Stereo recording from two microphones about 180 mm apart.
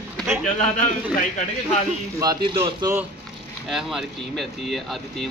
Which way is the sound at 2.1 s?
20° right (ahead or behind).